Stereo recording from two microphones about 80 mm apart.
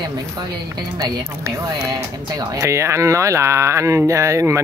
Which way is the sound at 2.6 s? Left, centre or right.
Right.